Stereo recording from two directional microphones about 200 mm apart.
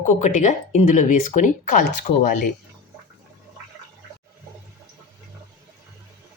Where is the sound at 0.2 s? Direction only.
40° left (ahead or behind).